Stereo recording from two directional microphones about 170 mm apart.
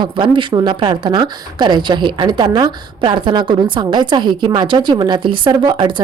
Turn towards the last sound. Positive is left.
turn(degrees=-25)  # may be behind; listen again after turning